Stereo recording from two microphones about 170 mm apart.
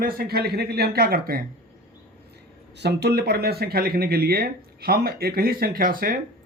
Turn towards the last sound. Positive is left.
turn(degrees=-60)  # may be behind; listen again after turning